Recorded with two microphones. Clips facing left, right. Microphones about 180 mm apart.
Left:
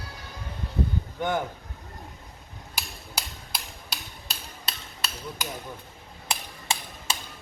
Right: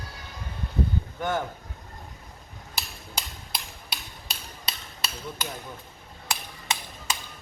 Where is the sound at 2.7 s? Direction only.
5° left (ahead or behind).